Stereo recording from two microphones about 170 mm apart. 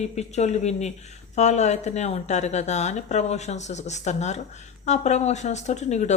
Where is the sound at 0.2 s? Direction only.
40° left (ahead or behind).